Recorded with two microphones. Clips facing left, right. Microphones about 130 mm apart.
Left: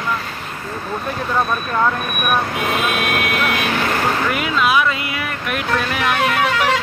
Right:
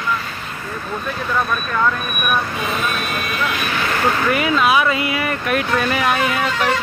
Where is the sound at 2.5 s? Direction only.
65° left (ahead or behind).